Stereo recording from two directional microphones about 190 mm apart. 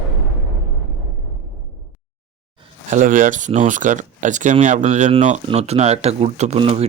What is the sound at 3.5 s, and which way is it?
Speech, 40° right (ahead or behind).